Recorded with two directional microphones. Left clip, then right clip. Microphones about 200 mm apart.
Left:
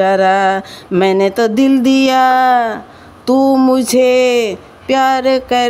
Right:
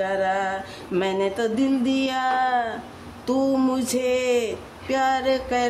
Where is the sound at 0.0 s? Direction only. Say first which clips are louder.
Left 12 dB; 45° left (ahead or behind).